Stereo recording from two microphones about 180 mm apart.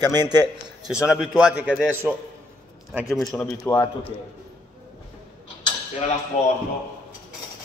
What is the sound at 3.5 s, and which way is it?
Speech, 20° left (ahead or behind).